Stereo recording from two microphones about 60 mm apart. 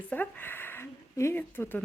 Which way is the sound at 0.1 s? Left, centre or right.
Left.